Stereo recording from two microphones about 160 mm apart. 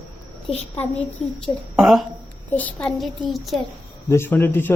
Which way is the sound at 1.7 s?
Centre (ahead or behind).